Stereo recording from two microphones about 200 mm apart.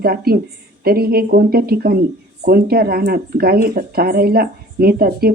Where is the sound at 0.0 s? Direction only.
50° right (ahead or behind).